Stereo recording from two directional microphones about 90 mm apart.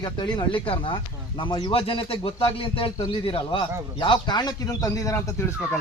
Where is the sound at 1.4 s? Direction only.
60° left (ahead or behind).